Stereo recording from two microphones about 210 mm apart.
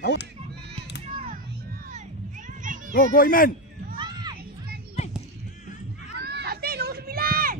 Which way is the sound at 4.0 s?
20° right (ahead or behind).